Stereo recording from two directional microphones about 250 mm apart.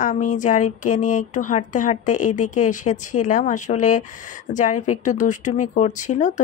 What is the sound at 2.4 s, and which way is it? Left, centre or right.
Speech, left.